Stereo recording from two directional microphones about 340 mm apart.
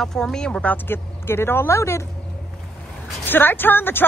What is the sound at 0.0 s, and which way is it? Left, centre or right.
Speech, centre.